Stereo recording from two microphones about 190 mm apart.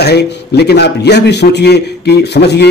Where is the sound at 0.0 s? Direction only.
60° left (ahead or behind).